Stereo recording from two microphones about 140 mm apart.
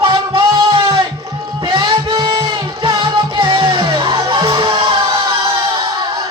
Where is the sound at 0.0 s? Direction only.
35° right (ahead or behind).